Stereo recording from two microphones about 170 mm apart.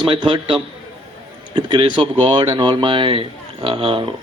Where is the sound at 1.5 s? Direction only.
30° right (ahead or behind).